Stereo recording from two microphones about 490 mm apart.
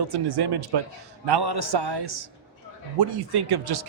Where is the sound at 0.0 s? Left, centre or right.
Right.